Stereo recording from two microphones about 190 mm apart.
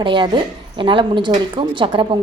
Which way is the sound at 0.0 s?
25° right (ahead or behind).